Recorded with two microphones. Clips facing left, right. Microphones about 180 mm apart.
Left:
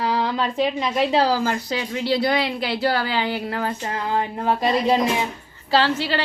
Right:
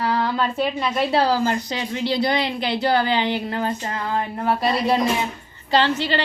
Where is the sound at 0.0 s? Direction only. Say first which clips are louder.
Right 1 dB; 15° left (ahead or behind).